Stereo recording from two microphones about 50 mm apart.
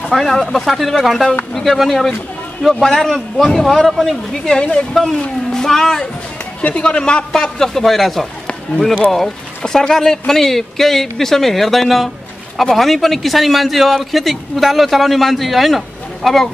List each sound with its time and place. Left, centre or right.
0.1 s a man's voice: centre
4.3 s a man's voice: centre
6.6 s a man's voice: centre